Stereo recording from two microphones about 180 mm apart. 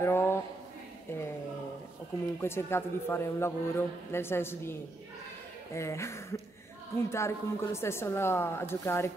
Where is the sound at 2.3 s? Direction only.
15° left (ahead or behind).